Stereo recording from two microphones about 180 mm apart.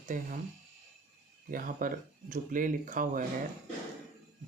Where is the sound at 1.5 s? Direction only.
50° right (ahead or behind).